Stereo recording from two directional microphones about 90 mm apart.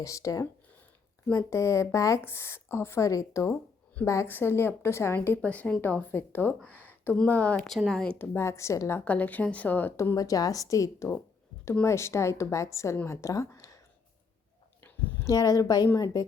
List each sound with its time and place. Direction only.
0.0 s a woman's voice: 35° left (ahead or behind)
6.6 s a sound: 20° left (ahead or behind)
7.3 s speech: 15° left (ahead or behind)
8.2 s a woman's voice: 25° left (ahead or behind)
9.0 s a woman's voice: 15° left (ahead or behind)
10.2 s a woman's voice: 40° left (ahead or behind)
14.8 s a sound: 20° left (ahead or behind)
15.2 s a woman's voice: 40° left (ahead or behind)